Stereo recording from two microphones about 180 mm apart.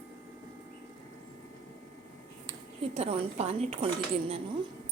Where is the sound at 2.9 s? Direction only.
35° right (ahead or behind).